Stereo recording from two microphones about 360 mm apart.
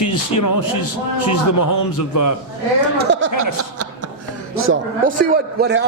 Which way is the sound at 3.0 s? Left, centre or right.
Right.